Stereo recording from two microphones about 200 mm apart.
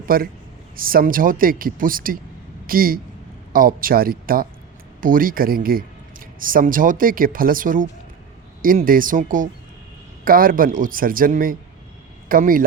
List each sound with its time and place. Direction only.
0.1 s a man's voice: 45° right (ahead or behind)